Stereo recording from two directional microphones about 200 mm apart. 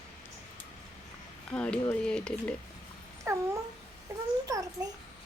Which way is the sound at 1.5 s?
5° left (ahead or behind).